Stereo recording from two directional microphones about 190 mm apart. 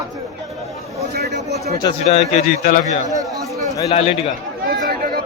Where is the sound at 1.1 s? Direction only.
55° right (ahead or behind).